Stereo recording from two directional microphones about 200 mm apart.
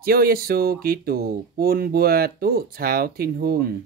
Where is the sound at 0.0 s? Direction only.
50° right (ahead or behind).